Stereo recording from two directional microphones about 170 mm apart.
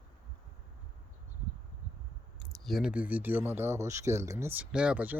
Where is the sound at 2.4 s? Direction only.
Centre (ahead or behind).